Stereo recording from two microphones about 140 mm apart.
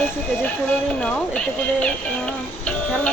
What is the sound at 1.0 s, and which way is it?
Speech, 5° left (ahead or behind).